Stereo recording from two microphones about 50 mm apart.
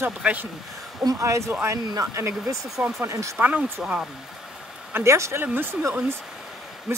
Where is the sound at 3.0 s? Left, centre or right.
Right.